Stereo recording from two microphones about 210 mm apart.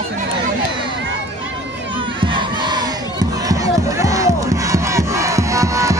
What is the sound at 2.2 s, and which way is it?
Crowd, 20° right (ahead or behind).